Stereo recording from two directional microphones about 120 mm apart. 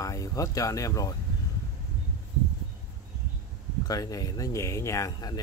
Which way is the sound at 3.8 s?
30° left (ahead or behind).